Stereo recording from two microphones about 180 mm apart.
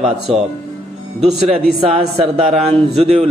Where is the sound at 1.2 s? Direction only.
30° right (ahead or behind).